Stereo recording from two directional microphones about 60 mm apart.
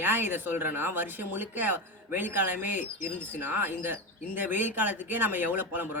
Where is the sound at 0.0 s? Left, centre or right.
Right.